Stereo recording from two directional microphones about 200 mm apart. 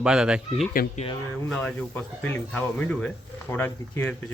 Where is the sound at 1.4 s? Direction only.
5° left (ahead or behind).